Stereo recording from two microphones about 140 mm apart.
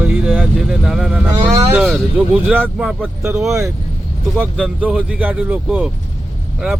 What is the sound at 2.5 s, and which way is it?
Speech, 15° right (ahead or behind).